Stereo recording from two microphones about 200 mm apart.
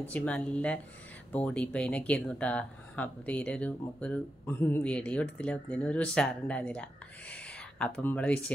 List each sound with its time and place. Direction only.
0.1 s speech: 5° left (ahead or behind)